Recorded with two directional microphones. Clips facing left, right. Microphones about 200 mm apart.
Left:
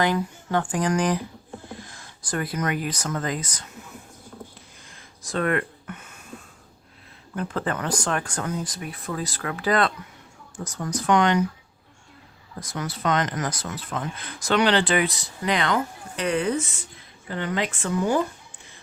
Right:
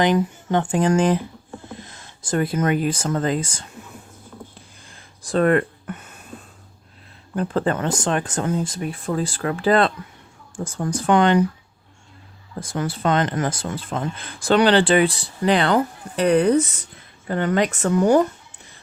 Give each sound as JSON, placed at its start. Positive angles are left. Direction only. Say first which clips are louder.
{"t": 0.0, "sound": "speech", "louder": "right 5 dB", "side_deg": -20}
{"t": 4.9, "sound": "a sound", "louder": "right 7 dB", "side_deg": -35}
{"t": 7.3, "sound": "speech", "louder": "right 6 dB", "side_deg": -35}
{"t": 12.5, "sound": "speech", "louder": "right 6 dB", "side_deg": -30}
{"t": 17.2, "sound": "speech", "louder": "right 7 dB", "side_deg": -50}